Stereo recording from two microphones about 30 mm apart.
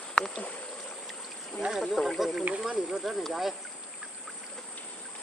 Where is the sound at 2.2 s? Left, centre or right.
Centre.